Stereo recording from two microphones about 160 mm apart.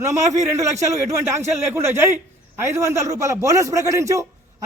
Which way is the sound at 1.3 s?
15° right (ahead or behind).